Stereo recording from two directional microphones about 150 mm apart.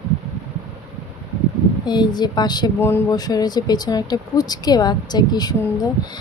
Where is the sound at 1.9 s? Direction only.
30° left (ahead or behind).